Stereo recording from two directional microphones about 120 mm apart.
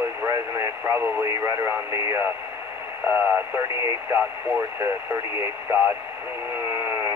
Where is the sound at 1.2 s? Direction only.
25° right (ahead or behind).